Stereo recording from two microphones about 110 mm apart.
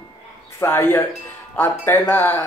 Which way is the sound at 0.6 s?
20° left (ahead or behind).